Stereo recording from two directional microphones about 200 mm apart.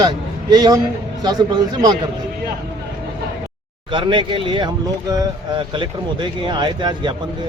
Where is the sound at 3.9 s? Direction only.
25° right (ahead or behind).